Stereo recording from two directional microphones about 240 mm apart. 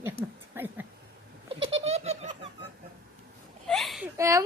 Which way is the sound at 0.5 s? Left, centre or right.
Centre.